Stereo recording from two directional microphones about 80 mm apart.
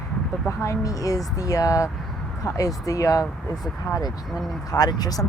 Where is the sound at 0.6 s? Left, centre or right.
Left.